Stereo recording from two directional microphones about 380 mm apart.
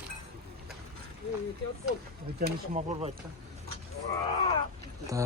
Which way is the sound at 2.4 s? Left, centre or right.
Centre.